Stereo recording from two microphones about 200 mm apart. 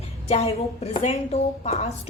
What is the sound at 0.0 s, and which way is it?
A woman's voice, 30° left (ahead or behind).